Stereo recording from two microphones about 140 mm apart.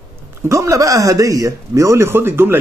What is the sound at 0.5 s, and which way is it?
Speech, 20° right (ahead or behind).